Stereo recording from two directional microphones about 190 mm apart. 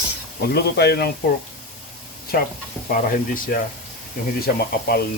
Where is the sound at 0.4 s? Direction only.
55° left (ahead or behind).